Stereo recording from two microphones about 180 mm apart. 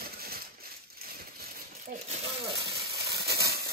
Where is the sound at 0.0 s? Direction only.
60° right (ahead or behind).